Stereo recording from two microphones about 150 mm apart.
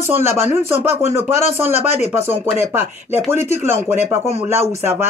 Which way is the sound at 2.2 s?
15° right (ahead or behind).